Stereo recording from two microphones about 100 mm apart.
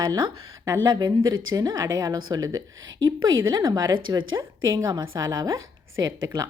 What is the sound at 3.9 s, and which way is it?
Speech, 55° right (ahead or behind).